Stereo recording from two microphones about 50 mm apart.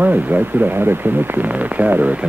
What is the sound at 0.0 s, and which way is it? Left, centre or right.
Speech, right.